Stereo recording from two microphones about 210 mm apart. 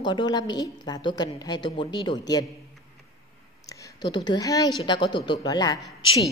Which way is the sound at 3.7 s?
20° left (ahead or behind).